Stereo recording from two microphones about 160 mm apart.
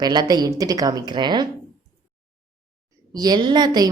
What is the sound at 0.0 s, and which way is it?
A woman's voice, 25° right (ahead or behind).